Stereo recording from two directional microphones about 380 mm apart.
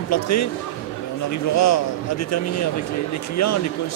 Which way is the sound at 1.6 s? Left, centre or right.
Left.